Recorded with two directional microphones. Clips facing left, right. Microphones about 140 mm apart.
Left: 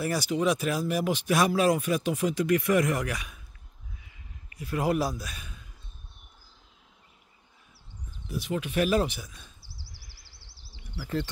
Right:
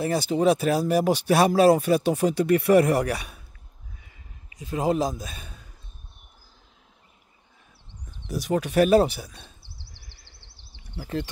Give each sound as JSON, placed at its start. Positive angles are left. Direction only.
{"t": 0.0, "sound": "speech", "side_deg": -25}
{"t": 4.6, "sound": "a man's voice", "side_deg": -20}
{"t": 8.3, "sound": "speech", "side_deg": -40}
{"t": 10.4, "sound": "insect", "side_deg": -25}